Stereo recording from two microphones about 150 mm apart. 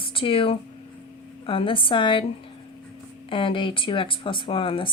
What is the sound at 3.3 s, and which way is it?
Speech, 35° left (ahead or behind).